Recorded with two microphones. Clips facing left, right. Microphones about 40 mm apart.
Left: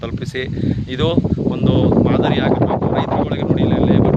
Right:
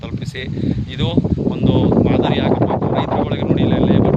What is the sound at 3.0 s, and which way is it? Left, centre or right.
Speech, centre.